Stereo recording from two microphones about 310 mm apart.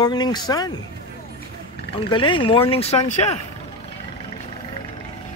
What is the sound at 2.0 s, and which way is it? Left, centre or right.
Speech, centre.